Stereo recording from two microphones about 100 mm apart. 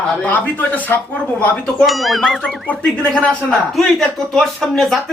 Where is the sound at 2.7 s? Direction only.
15° left (ahead or behind).